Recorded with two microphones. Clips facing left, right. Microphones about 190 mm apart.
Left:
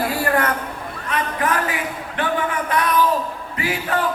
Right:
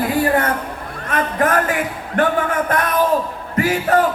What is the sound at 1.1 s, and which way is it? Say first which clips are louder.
A man's voice: right 4 dB; 50° right (ahead or behind).